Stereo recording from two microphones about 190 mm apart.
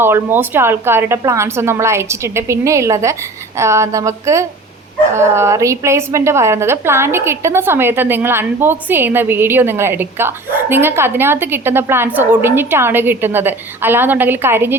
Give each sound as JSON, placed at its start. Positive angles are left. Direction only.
{"t": 0.0, "sound": "a woman's voice", "side_deg": -10}